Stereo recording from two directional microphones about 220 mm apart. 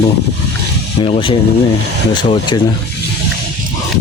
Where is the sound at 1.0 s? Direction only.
25° left (ahead or behind).